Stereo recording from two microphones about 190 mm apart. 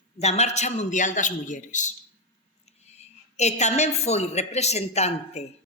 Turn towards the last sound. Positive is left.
turn(degrees=35)  # may be behind; listen again after turning